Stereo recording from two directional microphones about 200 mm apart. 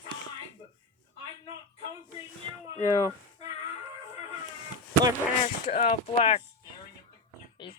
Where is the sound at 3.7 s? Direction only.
30° left (ahead or behind).